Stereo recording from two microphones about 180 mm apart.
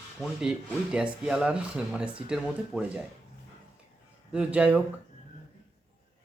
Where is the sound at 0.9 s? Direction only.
5° right (ahead or behind).